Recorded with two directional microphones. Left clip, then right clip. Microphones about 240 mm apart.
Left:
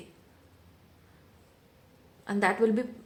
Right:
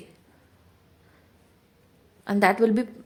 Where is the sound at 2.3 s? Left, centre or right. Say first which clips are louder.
Right 5 dB; right.